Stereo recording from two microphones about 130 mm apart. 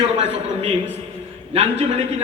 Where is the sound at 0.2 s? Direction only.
55° right (ahead or behind).